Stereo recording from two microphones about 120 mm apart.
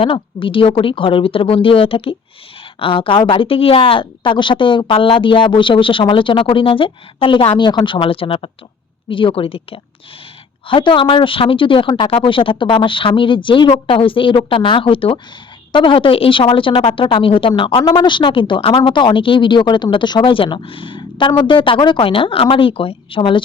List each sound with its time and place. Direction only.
0.0 s a woman's voice: 45° left (ahead or behind)